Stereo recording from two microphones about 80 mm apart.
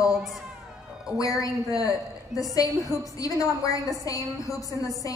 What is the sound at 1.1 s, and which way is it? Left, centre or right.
A woman's voice, left.